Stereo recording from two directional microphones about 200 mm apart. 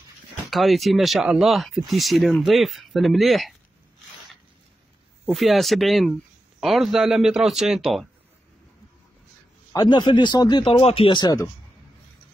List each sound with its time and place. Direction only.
0.5 s speech: centre (ahead or behind)
5.2 s speech: centre (ahead or behind)
9.7 s speech: 20° left (ahead or behind)